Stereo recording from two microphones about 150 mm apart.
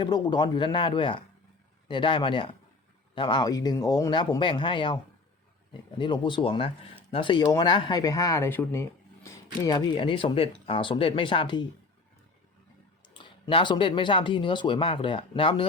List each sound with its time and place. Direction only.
0.0 s speech: 30° left (ahead or behind)
6.0 s speech: 30° left (ahead or behind)
13.1 s speech: 30° left (ahead or behind)